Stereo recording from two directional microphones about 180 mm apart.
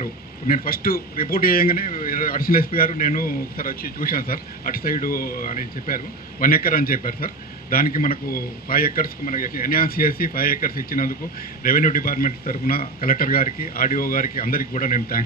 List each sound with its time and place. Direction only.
0.0 s a man's voice: 50° left (ahead or behind)